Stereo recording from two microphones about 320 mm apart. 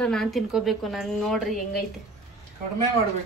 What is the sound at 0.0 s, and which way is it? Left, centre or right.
A woman's voice, centre.